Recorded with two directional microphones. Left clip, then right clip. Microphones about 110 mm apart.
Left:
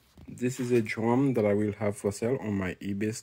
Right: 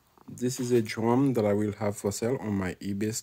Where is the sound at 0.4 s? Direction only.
5° right (ahead or behind).